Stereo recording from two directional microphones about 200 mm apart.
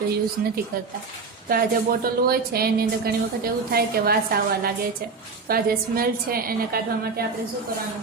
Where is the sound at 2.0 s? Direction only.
50° right (ahead or behind).